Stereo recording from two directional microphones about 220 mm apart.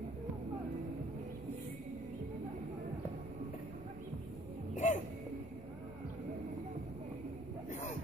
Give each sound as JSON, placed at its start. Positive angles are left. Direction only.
{"t": 4.7, "sound": "music", "side_deg": 35}